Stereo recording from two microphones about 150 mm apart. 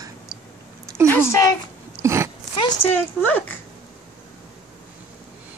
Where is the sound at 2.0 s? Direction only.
20° right (ahead or behind).